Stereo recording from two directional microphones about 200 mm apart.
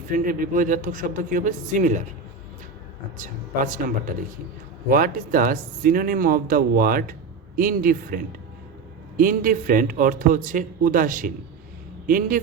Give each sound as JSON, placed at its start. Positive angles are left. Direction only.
{"t": 0.3, "sound": "speech", "side_deg": -45}
{"t": 3.2, "sound": "speech", "side_deg": -45}